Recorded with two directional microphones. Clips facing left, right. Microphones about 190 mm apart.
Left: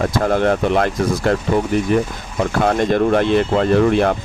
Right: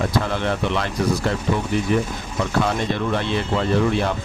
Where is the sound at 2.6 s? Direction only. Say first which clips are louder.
Left 7 dB; 50° left (ahead or behind).